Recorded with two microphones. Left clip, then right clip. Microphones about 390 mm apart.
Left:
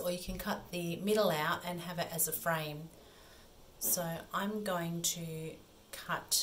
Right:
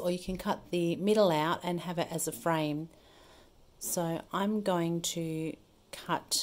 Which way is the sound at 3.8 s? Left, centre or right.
Centre.